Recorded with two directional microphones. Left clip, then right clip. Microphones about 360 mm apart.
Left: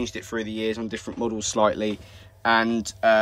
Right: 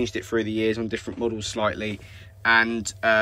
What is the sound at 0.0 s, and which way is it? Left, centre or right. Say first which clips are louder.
Speech: right 4 dB; centre.